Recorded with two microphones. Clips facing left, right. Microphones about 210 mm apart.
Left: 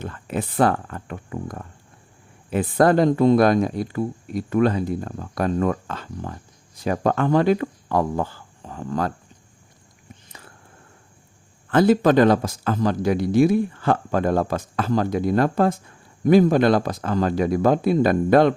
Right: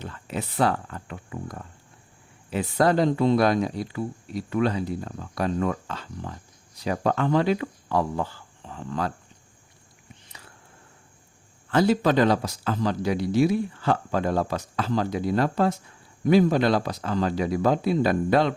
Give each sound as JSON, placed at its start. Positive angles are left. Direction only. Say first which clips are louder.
{"t": 0.0, "sound": "speech", "louder": "left 5 dB", "side_deg": 50}
{"t": 10.2, "sound": "a sound", "louder": "left 3 dB", "side_deg": 50}
{"t": 11.7, "sound": "speech", "louder": "left 5 dB", "side_deg": 50}